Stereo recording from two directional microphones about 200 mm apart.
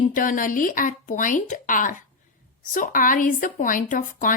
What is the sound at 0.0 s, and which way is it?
A woman's voice, 40° left (ahead or behind).